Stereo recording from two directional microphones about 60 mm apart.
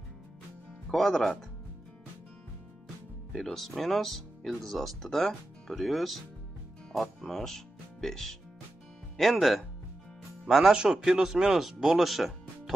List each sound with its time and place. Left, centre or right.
0.8 s speech: centre
3.3 s speech: centre